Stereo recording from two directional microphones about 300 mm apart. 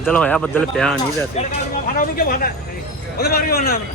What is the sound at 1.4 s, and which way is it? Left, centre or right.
A man's voice, left.